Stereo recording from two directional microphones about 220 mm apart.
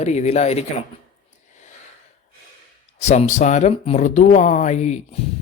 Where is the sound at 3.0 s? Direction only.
30° left (ahead or behind).